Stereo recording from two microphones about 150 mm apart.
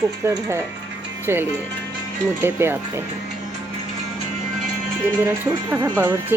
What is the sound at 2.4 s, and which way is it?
Speech, 15° right (ahead or behind).